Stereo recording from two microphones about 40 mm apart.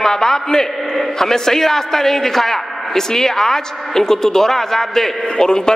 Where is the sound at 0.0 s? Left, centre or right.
Centre.